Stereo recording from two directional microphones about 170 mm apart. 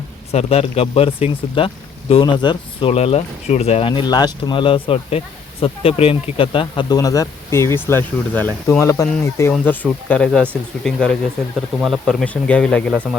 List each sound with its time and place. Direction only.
0.3 s speech: 35° left (ahead or behind); by 9.5 s 15° left (ahead or behind)
10.1 s speech: 5° left (ahead or behind)